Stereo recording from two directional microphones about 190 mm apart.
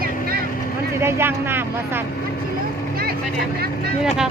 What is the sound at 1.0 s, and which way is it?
Speech, 10° right (ahead or behind).